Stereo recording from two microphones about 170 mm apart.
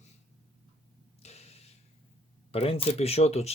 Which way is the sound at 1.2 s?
40° left (ahead or behind).